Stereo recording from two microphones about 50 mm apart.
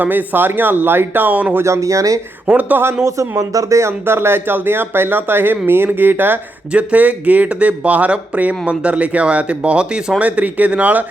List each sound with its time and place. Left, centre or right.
0.0 s speech: right
1.6 s speech: right
2.5 s speech: right
2.8 s speech: right
4.0 s speech: right
6.7 s speech: right